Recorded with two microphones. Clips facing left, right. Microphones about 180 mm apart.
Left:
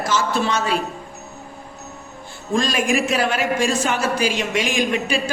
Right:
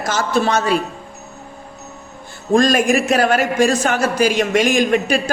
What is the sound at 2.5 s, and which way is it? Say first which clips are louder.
Speech: right 6 dB; 45° right (ahead or behind).